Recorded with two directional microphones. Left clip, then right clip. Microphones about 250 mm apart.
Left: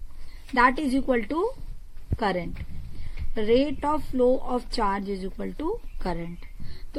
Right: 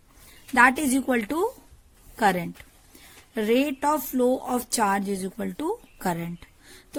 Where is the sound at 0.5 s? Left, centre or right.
Right.